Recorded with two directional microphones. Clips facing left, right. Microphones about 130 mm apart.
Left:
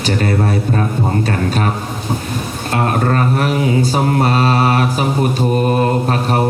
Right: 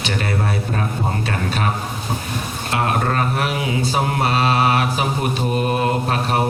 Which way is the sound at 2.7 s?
40° left (ahead or behind).